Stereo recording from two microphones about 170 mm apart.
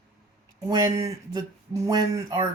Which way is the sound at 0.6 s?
20° right (ahead or behind).